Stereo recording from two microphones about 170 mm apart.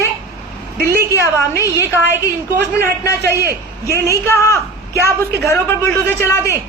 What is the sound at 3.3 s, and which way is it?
Speech, 15° right (ahead or behind).